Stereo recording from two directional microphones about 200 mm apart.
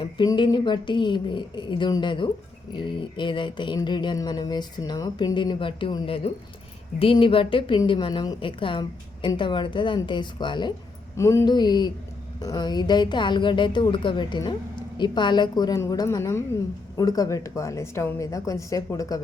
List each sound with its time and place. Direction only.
0.0 s a woman's voice: 25° left (ahead or behind)